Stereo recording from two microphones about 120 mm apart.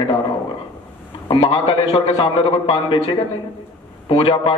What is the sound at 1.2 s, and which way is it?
A man's voice, 45° left (ahead or behind).